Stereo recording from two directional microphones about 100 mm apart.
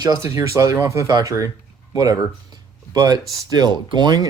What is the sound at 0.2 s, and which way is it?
Speech, 30° right (ahead or behind).